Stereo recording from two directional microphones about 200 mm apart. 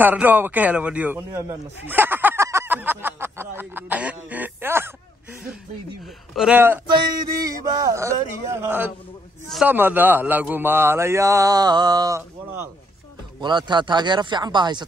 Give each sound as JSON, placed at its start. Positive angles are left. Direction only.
{"t": 0.0, "sound": "a man's voice", "side_deg": -10}
{"t": 6.0, "sound": "a man's voice", "side_deg": 0}
{"t": 13.4, "sound": "speech", "side_deg": -20}